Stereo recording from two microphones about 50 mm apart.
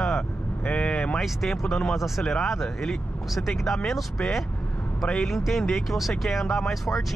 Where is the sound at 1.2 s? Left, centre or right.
Centre.